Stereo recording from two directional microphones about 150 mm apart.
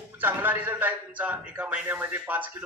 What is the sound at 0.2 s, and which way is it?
A man's voice, 15° right (ahead or behind).